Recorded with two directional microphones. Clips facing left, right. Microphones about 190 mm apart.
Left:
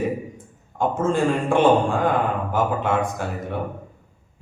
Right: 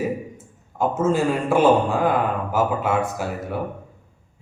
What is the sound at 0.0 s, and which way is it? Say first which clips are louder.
A man's voice: even; 5° right (ahead or behind).